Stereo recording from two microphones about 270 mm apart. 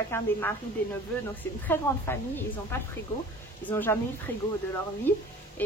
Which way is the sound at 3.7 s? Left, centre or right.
Centre.